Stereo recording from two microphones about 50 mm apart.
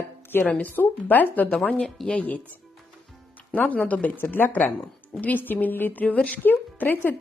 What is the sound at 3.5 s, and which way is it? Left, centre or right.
Speech, left.